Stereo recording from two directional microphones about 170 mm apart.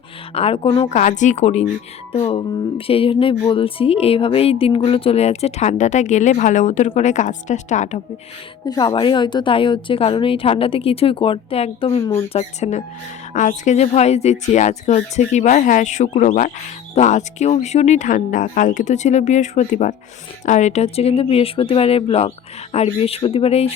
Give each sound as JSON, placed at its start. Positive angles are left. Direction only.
{"t": 0.3, "sound": "a woman's voice", "side_deg": 35}
{"t": 0.9, "sound": "a woman's voice", "side_deg": 45}
{"t": 8.6, "sound": "a woman's voice", "side_deg": 25}